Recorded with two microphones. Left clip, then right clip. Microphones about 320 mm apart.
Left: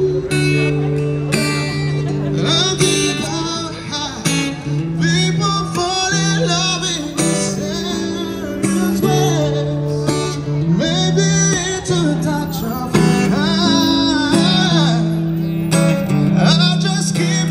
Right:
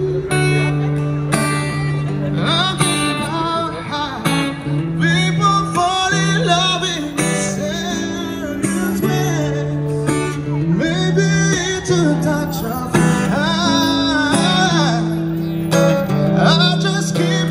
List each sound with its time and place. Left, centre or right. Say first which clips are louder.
0.4 s music: even; centre
2.4 s music: left 1 dB; centre
8.7 s music: left 5 dB; centre
11.1 s music: even; centre
12.9 s music: left 1 dB; centre